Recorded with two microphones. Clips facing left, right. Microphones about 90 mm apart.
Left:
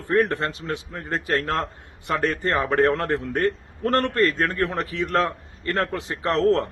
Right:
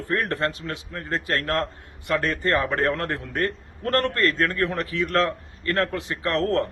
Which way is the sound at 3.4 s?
20° left (ahead or behind).